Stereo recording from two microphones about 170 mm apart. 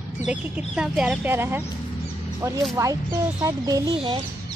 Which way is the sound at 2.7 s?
20° right (ahead or behind).